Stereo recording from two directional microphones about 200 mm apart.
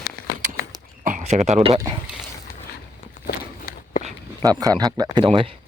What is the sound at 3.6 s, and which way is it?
Walk, 45° left (ahead or behind).